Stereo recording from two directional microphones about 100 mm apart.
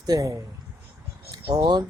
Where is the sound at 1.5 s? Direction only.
40° right (ahead or behind).